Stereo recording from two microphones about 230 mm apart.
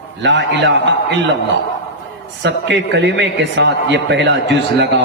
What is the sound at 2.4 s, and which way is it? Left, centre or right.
A man's voice, right.